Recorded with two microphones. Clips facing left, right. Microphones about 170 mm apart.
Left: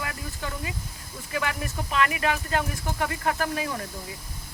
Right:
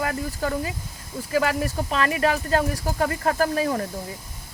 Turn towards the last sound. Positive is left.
turn(degrees=-40)  # may be behind; listen again after turning